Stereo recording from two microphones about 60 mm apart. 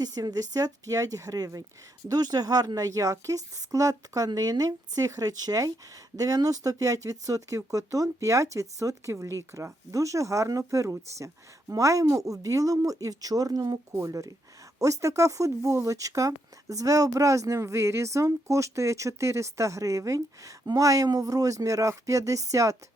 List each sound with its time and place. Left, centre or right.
0.0 s speech: right
2.0 s a woman's voice: right
14.1 s speech: right